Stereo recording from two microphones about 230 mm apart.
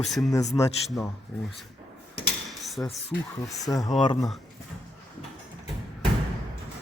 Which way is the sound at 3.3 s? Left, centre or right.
Centre.